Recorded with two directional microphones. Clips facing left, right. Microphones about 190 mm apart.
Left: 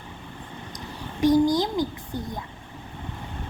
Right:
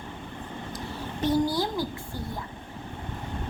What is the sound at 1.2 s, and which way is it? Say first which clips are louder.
A child's voice: left 6 dB; 15° left (ahead or behind).